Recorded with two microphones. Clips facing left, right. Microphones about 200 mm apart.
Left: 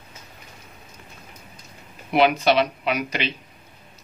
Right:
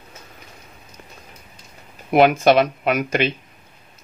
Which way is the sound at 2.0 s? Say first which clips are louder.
Right 4 dB; 50° right (ahead or behind).